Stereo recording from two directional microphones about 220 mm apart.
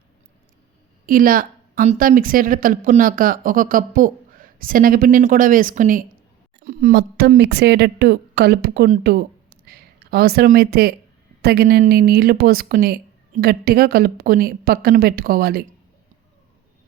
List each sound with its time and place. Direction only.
1.0 s a woman's voice: 40° right (ahead or behind)